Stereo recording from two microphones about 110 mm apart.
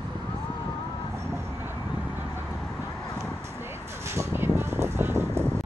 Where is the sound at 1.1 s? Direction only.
25° right (ahead or behind).